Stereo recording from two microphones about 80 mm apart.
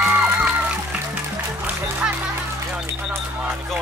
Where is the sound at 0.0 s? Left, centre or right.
Centre.